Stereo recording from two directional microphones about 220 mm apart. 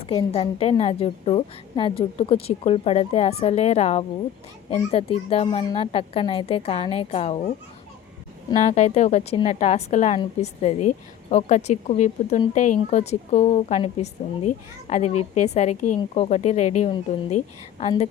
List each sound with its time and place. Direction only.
0.0 s a woman's voice: 25° left (ahead or behind)
8.5 s a woman's voice: 30° left (ahead or behind)